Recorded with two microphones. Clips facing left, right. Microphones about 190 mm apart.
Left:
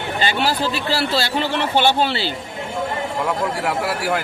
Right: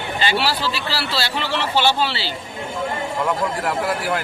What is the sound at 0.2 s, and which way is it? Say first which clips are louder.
A man's voice: left 1 dB; 45° left (ahead or behind).